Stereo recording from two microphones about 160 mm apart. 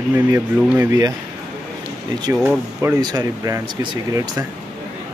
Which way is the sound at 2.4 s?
10° right (ahead or behind).